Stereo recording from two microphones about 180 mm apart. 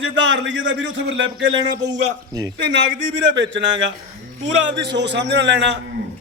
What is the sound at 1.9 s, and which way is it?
Speech, 20° right (ahead or behind).